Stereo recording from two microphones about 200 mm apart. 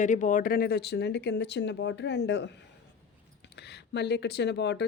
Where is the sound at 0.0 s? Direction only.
40° left (ahead or behind); by 2.5 s 60° left (ahead or behind).